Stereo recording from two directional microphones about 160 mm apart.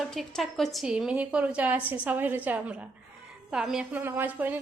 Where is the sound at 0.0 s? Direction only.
Centre (ahead or behind).